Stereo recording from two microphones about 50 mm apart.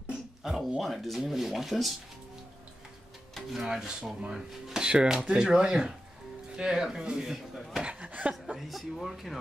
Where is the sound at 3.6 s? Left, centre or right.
Centre.